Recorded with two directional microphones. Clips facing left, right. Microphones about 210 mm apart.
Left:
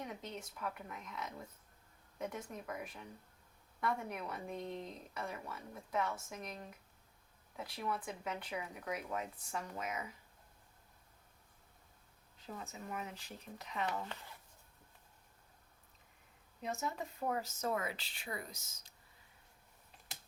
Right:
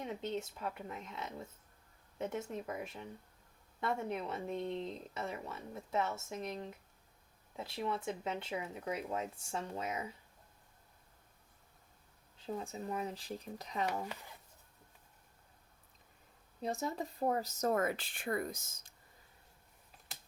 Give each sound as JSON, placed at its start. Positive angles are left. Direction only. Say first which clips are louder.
{"t": 0.0, "sound": "speech", "louder": "right 6 dB", "side_deg": -25}
{"t": 12.5, "sound": "speech", "louder": "right 6 dB", "side_deg": -30}
{"t": 14.0, "sound": "speech", "louder": "right 3 dB", "side_deg": -15}
{"t": 16.6, "sound": "speech", "louder": "right 3 dB", "side_deg": -35}